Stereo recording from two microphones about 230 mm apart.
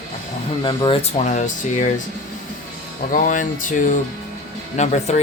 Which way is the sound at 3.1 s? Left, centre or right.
Left.